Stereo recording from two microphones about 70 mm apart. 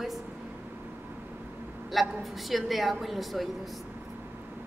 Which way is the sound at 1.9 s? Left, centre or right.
Centre.